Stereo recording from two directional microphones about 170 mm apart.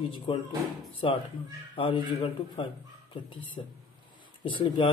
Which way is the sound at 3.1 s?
30° left (ahead or behind).